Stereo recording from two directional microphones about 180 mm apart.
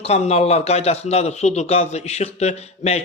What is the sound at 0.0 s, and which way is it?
A man's voice, 35° left (ahead or behind).